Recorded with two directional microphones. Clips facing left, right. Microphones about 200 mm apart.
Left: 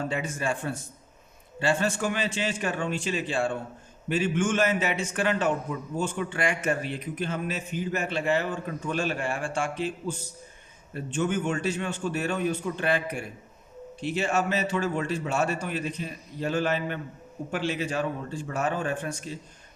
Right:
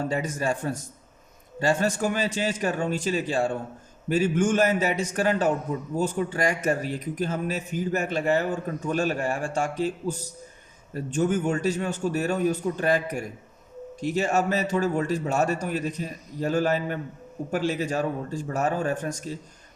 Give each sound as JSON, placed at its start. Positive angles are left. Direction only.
{"t": 0.0, "sound": "a man's voice", "side_deg": -40}